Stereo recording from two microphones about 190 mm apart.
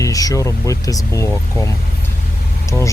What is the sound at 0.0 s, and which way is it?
Speech, 20° left (ahead or behind).